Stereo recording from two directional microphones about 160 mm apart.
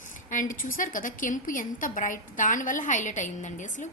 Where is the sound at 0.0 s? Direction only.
55° left (ahead or behind).